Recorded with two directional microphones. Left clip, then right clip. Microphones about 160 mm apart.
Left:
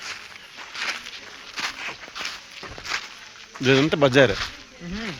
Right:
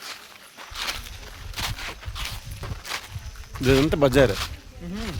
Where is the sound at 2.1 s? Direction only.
15° right (ahead or behind).